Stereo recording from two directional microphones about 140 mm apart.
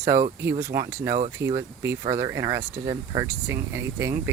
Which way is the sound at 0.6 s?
20° right (ahead or behind).